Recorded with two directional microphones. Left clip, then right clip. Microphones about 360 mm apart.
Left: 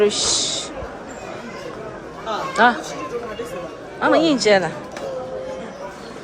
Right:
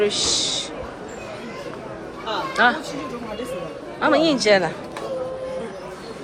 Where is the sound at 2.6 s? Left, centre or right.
Centre.